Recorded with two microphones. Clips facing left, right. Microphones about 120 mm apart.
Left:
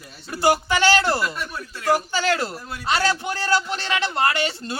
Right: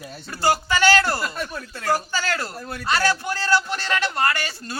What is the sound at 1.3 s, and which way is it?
Speech, 50° right (ahead or behind).